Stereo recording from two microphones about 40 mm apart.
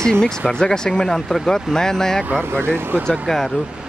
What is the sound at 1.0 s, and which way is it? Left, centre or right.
Speech, centre.